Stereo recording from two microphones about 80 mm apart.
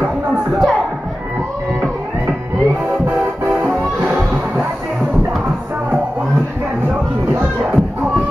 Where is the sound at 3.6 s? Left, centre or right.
Centre.